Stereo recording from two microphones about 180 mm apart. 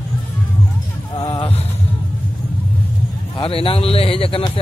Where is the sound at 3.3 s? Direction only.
30° left (ahead or behind).